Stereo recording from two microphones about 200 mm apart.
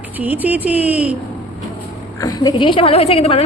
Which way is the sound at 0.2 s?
10° right (ahead or behind).